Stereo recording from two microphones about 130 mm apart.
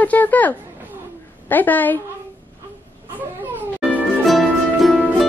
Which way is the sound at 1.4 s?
15° left (ahead or behind).